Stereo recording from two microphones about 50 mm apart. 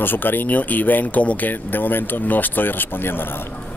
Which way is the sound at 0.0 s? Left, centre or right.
Left.